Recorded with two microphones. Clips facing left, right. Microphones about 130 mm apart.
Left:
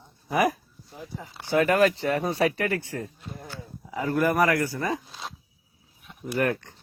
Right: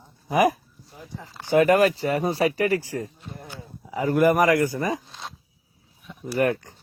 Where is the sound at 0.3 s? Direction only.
10° right (ahead or behind).